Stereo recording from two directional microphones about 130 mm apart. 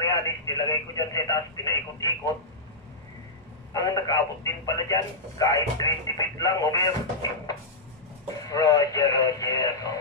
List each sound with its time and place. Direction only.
0.0 s speech: 25° left (ahead or behind)
3.7 s speech: 25° left (ahead or behind)